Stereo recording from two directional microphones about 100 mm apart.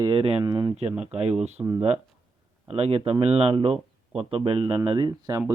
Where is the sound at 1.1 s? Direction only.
90° right.